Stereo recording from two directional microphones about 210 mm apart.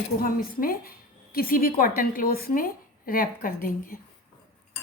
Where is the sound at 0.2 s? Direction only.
40° left (ahead or behind).